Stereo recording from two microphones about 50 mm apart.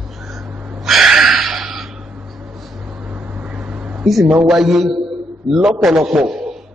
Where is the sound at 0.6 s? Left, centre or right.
Centre.